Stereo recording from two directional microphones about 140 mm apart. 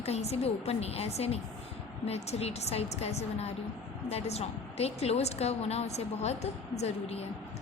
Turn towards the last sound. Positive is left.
turn(degrees=50)  # may be behind; listen again after turning